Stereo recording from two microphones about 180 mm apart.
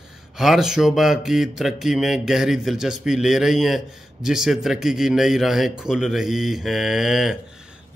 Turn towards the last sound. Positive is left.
turn(degrees=-5)  # may be behind; listen again after turning